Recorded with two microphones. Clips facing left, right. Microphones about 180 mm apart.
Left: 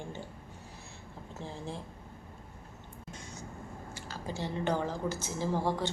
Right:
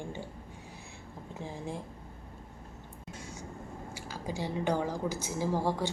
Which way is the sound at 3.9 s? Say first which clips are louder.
Right 2 dB; 10° right (ahead or behind).